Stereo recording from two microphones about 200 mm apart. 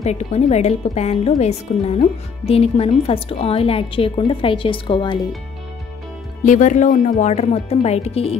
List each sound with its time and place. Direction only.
0.0 s a woman's voice: 35° left (ahead or behind)
6.4 s speech: 40° left (ahead or behind)